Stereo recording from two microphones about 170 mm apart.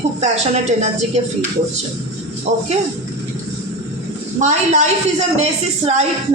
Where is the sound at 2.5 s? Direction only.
40° right (ahead or behind).